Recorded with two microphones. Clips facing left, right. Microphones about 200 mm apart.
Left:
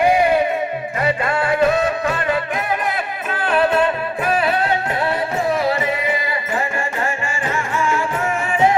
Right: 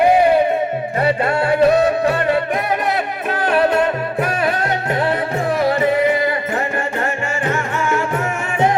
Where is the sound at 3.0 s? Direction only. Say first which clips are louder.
Right 4 dB; 45° right (ahead or behind).